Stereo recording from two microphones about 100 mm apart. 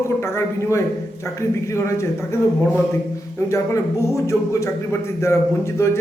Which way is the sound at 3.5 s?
30° left (ahead or behind).